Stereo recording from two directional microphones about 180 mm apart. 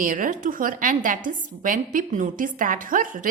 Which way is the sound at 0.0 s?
50° right (ahead or behind).